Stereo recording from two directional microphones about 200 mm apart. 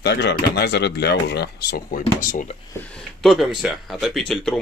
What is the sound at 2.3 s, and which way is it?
Speech, 40° left (ahead or behind).